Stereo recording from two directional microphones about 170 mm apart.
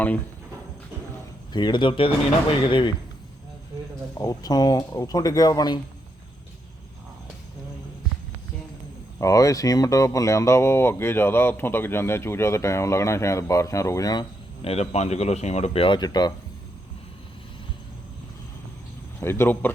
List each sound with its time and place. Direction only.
1.5 s speech: 25° left (ahead or behind)
4.1 s speech: 20° left (ahead or behind)
9.2 s speech: 20° left (ahead or behind)
14.6 s speech: 40° left (ahead or behind)
19.2 s speech: 15° left (ahead or behind)